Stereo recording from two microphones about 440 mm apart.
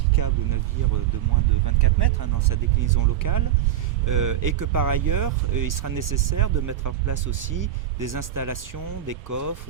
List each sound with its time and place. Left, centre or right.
0.2 s music: right
1.6 s speech: right